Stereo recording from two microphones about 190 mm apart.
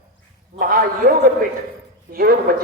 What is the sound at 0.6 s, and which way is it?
Speech, 50° right (ahead or behind).